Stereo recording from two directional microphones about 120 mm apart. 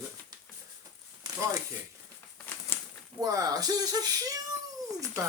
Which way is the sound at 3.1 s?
30° right (ahead or behind).